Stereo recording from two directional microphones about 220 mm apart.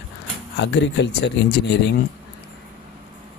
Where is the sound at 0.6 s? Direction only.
55° left (ahead or behind).